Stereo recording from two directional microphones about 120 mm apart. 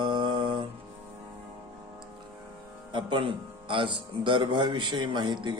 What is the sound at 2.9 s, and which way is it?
A man's voice, 45° right (ahead or behind).